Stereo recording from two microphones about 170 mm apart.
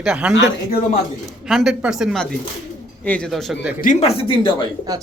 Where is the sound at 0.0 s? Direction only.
5° right (ahead or behind).